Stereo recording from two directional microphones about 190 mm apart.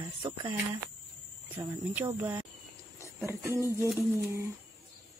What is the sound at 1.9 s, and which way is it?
Speech, 10° right (ahead or behind).